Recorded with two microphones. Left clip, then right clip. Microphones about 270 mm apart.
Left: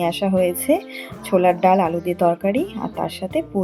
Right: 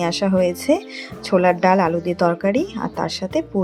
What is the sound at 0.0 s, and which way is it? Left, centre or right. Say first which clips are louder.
A woman's voice: even; right.